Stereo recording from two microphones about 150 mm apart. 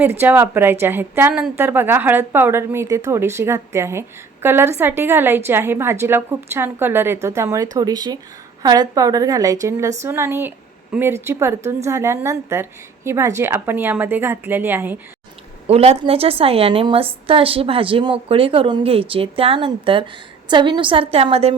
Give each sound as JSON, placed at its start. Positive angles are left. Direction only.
{"t": 0.0, "sound": "a woman's voice", "side_deg": -15}
{"t": 15.6, "sound": "a woman's voice", "side_deg": -45}